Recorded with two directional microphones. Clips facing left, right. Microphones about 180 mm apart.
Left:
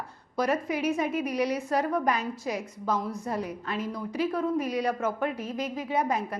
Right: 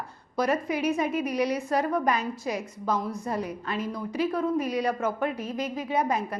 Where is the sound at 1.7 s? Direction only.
20° right (ahead or behind).